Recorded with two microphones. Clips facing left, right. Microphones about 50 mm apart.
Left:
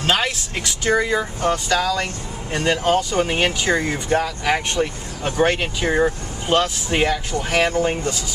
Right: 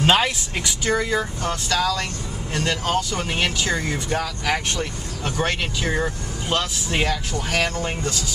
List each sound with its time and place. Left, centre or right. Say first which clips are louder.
0.8 s speech: left 3 dB; centre